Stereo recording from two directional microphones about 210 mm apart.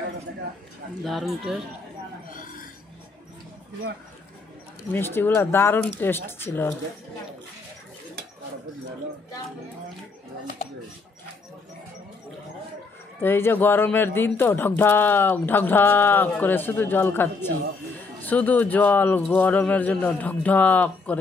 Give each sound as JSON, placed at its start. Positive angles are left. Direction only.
{"t": 1.0, "sound": "speech", "side_deg": 0}
{"t": 4.9, "sound": "speech", "side_deg": 10}
{"t": 13.2, "sound": "speech", "side_deg": 10}